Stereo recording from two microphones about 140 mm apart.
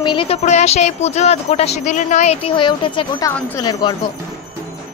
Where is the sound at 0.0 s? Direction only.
35° left (ahead or behind).